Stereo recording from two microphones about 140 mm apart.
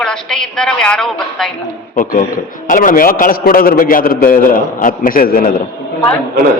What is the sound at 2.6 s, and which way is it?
A man's voice, 75° left (ahead or behind).